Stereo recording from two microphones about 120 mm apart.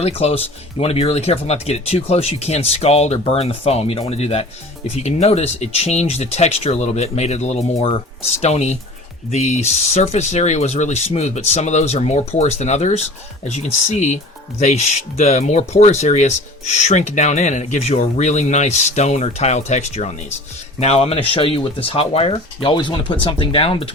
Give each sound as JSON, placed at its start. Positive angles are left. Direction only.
{"t": 0.0, "sound": "speech", "side_deg": 60}